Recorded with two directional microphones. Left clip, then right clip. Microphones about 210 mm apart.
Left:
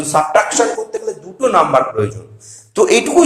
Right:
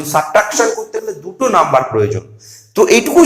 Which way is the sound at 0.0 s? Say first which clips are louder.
Even; 25° right (ahead or behind).